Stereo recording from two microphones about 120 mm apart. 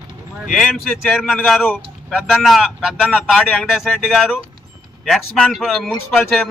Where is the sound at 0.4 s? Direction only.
Centre (ahead or behind).